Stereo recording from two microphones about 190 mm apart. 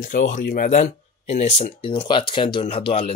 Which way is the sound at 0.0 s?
45° left (ahead or behind).